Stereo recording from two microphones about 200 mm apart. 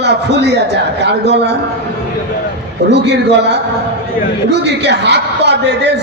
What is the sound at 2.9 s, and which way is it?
A man's voice, 60° right (ahead or behind).